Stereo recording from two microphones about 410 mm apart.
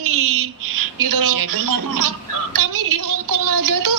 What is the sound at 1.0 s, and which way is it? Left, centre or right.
A woman's voice, right.